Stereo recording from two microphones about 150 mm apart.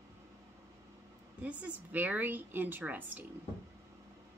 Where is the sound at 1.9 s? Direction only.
10° right (ahead or behind).